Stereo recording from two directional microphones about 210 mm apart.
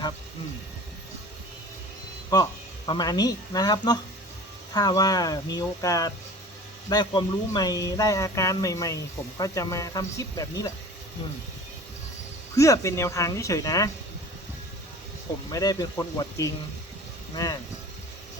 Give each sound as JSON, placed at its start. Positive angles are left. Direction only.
{"t": 2.3, "sound": "speech", "side_deg": 20}
{"t": 12.5, "sound": "speech", "side_deg": 15}
{"t": 15.4, "sound": "speech", "side_deg": 15}